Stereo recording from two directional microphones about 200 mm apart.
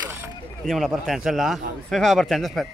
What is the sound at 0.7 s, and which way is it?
A man's voice, centre (ahead or behind).